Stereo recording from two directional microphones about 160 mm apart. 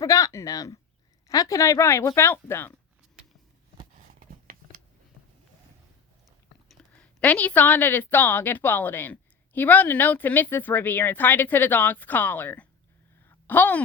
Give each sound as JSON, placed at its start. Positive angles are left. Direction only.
{"t": 0.0, "sound": "a woman's voice", "side_deg": 20}
{"t": 6.7, "sound": "a woman's voice", "side_deg": 5}
{"t": 13.2, "sound": "a sound", "side_deg": 10}